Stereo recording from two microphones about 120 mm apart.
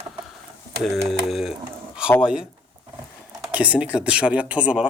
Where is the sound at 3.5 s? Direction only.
10° right (ahead or behind).